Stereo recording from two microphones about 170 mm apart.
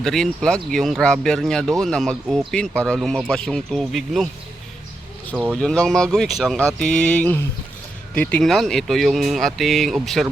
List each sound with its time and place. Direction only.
0.0 s speech: 5° left (ahead or behind)
5.3 s speech: 10° right (ahead or behind)
5.5 s speech: 5° left (ahead or behind)